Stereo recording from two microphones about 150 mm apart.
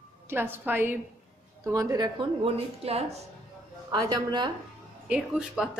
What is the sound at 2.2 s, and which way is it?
A woman's voice, 40° right (ahead or behind).